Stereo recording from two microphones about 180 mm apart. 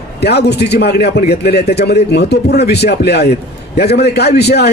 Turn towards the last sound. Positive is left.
turn(degrees=65)  # may be behind; listen again after turning